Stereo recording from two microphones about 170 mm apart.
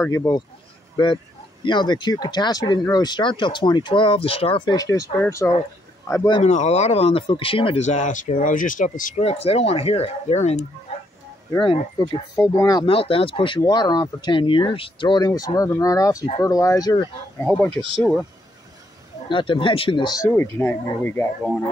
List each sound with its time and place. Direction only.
0.0 s speech: 20° left (ahead or behind)
0.9 s speech: 30° left (ahead or behind)
4.7 s speech: 20° left (ahead or behind)
6.4 s speech: 40° left (ahead or behind)
11.5 s speech: 25° left (ahead or behind)
12.8 s speech: 35° left (ahead or behind)
17.6 s speech: 5° left (ahead or behind)
19.2 s speech: 30° left (ahead or behind)
20.3 s speech: 10° left (ahead or behind)